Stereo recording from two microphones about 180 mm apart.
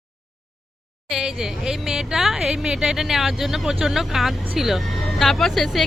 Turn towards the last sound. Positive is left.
turn(degrees=0)  # may be behind; listen again after turning